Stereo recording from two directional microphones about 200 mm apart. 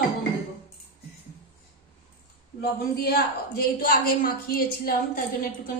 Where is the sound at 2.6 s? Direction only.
50° left (ahead or behind).